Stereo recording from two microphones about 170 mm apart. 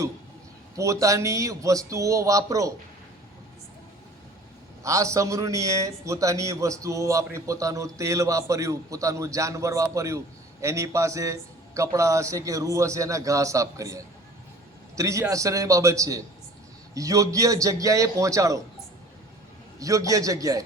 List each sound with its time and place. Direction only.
0.8 s a man's voice: 20° right (ahead or behind)
4.8 s a man's voice: 20° right (ahead or behind)
19.8 s a man's voice: 20° right (ahead or behind)